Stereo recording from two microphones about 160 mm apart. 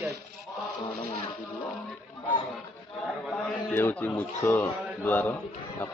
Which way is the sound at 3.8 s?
10° left (ahead or behind).